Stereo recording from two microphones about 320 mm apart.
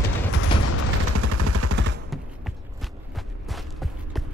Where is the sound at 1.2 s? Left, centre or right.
Right.